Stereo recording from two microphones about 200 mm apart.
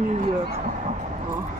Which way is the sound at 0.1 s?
35° right (ahead or behind).